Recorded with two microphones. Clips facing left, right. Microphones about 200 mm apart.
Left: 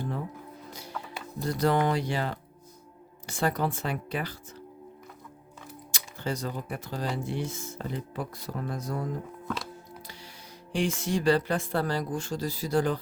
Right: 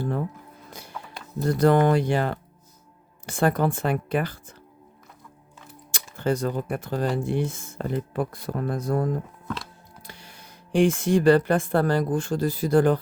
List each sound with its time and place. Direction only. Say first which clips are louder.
0.7 s rodents: even; 55° right (ahead or behind)
1.5 s speech: right 6 dB; 50° right (ahead or behind)
5.9 s speech: right 8 dB; 50° right (ahead or behind)
10.1 s speech: even; 55° right (ahead or behind)